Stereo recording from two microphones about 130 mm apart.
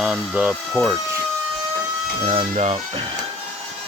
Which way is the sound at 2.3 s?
55° right (ahead or behind).